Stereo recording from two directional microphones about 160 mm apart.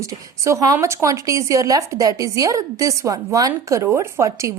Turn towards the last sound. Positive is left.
turn(degrees=-20)  # may be behind; listen again after turning